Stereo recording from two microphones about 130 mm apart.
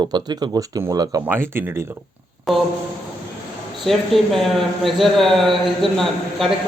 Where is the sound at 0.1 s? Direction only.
35° right (ahead or behind).